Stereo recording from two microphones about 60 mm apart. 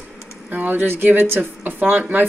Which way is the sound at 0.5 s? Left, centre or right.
Right.